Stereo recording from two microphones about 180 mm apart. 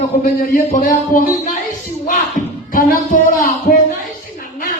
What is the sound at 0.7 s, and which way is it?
Speech, 45° left (ahead or behind).